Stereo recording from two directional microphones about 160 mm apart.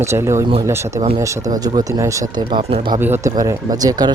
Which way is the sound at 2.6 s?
40° right (ahead or behind).